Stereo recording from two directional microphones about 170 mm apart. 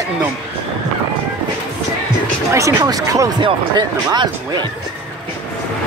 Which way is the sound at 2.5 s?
20° right (ahead or behind).